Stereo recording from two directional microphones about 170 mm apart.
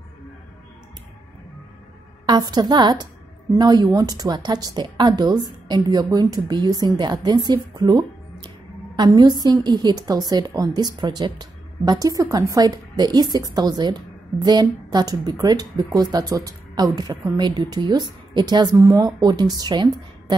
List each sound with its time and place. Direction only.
2.2 s a woman's voice: 25° right (ahead or behind)